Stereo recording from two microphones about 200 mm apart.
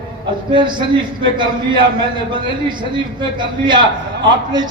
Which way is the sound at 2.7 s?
25° right (ahead or behind).